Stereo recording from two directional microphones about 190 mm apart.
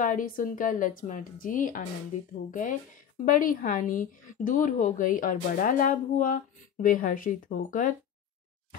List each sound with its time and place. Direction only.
0.0 s speech: 45° left (ahead or behind)